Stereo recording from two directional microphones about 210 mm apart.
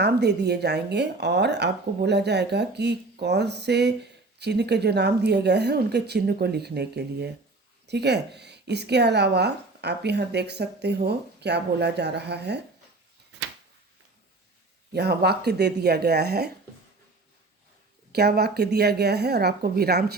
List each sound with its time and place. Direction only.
0.0 s a woman's voice: 50° right (ahead or behind)
14.9 s a woman's voice: 50° right (ahead or behind)
18.1 s a woman's voice: 50° right (ahead or behind)